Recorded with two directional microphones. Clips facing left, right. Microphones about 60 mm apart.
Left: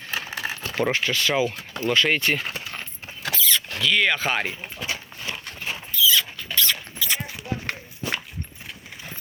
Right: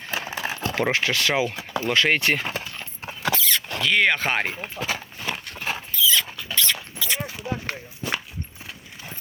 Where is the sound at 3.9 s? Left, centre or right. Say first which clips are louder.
Right 1 dB; right.